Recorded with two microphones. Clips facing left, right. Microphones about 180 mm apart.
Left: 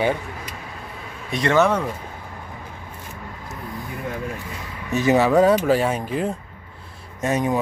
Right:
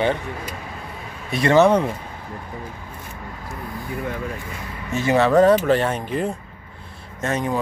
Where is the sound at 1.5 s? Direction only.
20° right (ahead or behind).